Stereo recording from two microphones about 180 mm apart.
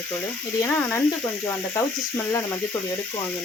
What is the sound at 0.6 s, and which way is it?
Speech, 10° left (ahead or behind).